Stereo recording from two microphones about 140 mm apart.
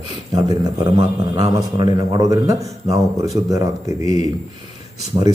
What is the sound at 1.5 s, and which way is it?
A man's voice, 25° right (ahead or behind).